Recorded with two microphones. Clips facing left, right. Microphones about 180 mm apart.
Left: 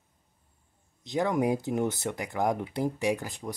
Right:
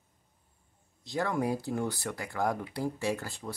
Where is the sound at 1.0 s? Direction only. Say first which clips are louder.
Left 4 dB; 20° left (ahead or behind).